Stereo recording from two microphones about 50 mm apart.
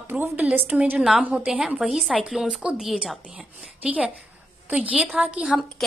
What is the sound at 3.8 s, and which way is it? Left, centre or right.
Speech, centre.